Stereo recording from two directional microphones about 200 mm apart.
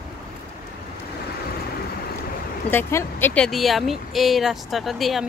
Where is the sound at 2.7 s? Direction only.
10° left (ahead or behind).